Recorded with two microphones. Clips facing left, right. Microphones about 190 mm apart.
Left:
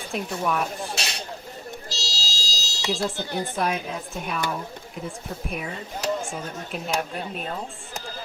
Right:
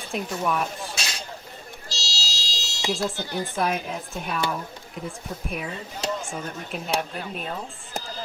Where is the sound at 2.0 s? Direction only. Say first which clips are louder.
Left 1 dB; 40° left (ahead or behind).